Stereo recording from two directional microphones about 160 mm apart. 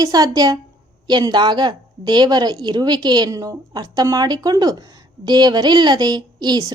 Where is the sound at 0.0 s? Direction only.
25° right (ahead or behind).